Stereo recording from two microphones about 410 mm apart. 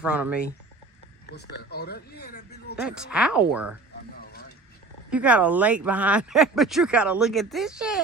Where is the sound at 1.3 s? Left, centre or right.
Left.